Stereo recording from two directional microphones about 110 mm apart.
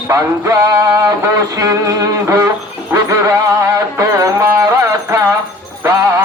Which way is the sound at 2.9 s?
30° right (ahead or behind).